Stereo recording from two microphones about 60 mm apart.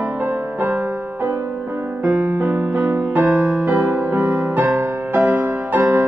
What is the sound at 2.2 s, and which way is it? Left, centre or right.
Music, right.